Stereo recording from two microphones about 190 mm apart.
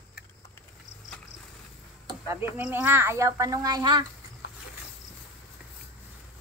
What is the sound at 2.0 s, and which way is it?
Speech, 15° right (ahead or behind).